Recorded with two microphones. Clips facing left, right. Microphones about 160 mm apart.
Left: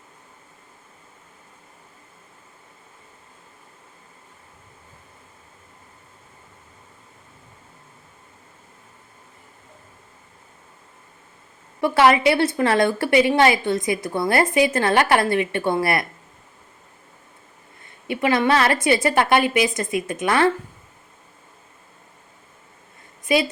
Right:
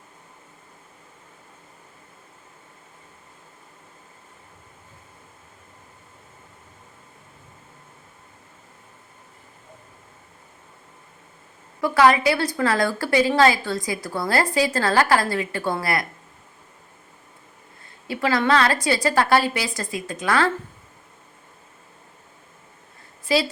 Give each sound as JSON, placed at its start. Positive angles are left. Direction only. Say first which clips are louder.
{"t": 11.8, "sound": "a woman's voice", "louder": "left 1 dB", "side_deg": 25}
{"t": 18.1, "sound": "a woman's voice", "louder": "left 1 dB", "side_deg": 20}